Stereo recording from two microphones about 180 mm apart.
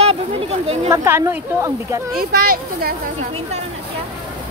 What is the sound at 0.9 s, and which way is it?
Speech, 15° right (ahead or behind).